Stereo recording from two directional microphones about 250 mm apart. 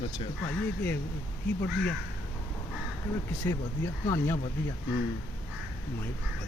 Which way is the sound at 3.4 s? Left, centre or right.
Centre.